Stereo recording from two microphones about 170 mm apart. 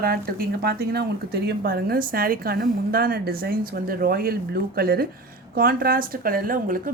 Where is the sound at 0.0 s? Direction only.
65° right (ahead or behind).